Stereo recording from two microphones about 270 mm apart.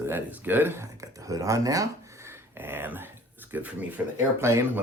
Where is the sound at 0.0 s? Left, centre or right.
Centre.